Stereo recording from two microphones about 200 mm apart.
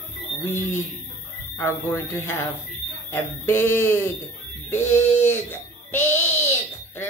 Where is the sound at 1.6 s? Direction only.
10° left (ahead or behind).